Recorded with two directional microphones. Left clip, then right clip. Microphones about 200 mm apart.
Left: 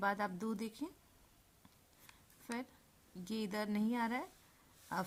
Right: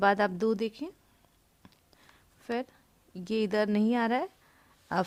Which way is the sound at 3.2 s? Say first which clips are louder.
Right 13 dB; 45° right (ahead or behind).